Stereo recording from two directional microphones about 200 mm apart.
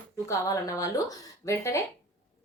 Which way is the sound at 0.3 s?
15° left (ahead or behind).